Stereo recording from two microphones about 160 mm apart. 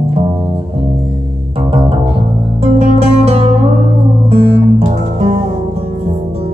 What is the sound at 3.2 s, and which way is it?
Music, 40° right (ahead or behind).